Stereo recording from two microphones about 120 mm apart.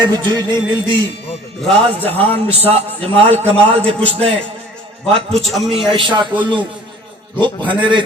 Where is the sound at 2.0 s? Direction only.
15° left (ahead or behind).